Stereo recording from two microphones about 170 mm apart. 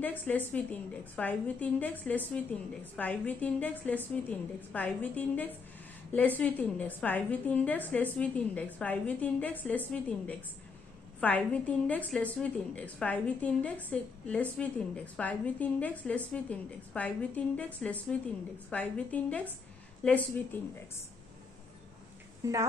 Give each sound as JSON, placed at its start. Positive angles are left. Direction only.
{"t": 0.0, "sound": "a woman's voice", "side_deg": 10}
{"t": 22.4, "sound": "speech", "side_deg": -20}